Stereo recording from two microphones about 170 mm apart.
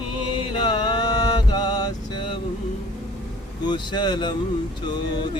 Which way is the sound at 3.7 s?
25° left (ahead or behind).